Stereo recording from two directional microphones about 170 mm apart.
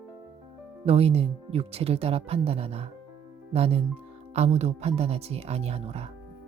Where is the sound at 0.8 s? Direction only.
35° right (ahead or behind).